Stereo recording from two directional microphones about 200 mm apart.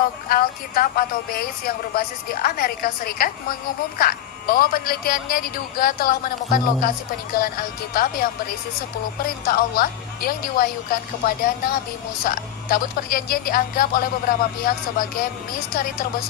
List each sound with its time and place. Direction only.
0.3 s a woman's voice: 45° left (ahead or behind)